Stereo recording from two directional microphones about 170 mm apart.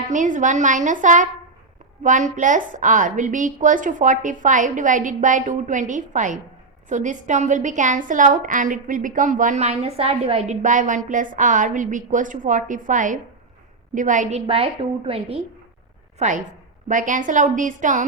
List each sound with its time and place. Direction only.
0.1 s a woman's voice: 50° right (ahead or behind)
16.1 s a woman's voice: 45° right (ahead or behind)